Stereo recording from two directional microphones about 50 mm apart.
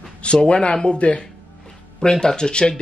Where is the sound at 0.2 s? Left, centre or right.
Left.